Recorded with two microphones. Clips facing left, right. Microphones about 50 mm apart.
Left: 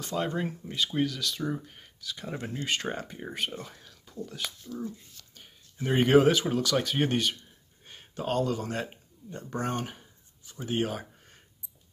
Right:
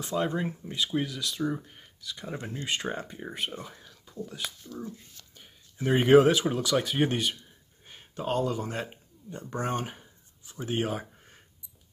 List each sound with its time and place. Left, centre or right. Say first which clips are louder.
0.0 s speech: right 1 dB; centre
2.6 s speech: even; centre
10.4 s a sound: even; right